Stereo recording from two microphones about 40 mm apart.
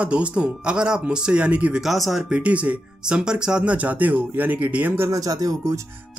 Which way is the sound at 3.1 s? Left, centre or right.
Right.